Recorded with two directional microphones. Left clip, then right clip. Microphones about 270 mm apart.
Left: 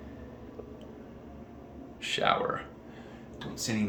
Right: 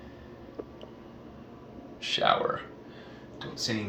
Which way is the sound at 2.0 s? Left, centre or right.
Centre.